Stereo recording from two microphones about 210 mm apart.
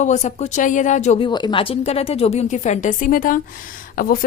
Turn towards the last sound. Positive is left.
turn(degrees=40)  # may be behind; listen again after turning